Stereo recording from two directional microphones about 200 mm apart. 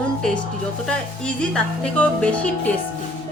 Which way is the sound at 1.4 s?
5° left (ahead or behind).